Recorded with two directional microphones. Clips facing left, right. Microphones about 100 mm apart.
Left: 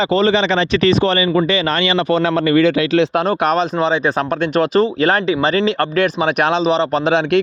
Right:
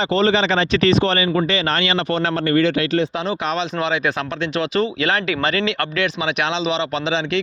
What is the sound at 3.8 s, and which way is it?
Speech, 30° left (ahead or behind).